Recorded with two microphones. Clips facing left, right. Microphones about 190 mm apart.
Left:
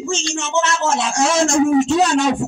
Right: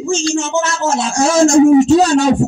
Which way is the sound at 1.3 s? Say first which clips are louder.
Right 8 dB; 40° right (ahead or behind).